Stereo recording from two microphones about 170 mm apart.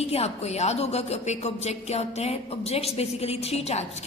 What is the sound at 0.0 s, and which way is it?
A woman's voice, 35° left (ahead or behind).